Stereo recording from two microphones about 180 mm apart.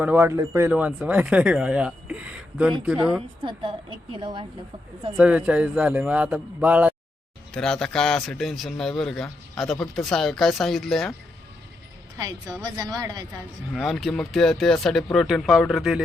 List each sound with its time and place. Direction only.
0.0 s speech: 10° right (ahead or behind)
3.4 s a woman's voice: 30° right (ahead or behind)
5.1 s speech: 5° right (ahead or behind)
7.5 s speech: 5° left (ahead or behind)
12.2 s a woman's voice: 20° right (ahead or behind)
13.7 s speech: centre (ahead or behind)